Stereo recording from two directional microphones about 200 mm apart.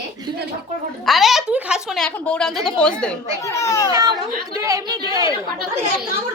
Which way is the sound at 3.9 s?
20° right (ahead or behind).